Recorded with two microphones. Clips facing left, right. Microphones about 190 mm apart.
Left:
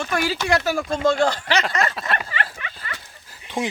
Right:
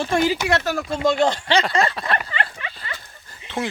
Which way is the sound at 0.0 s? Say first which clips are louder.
Right 4 dB; 25° right (ahead or behind).